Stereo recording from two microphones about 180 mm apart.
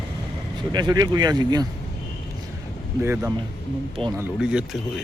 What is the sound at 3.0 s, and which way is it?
Speech, 15° right (ahead or behind).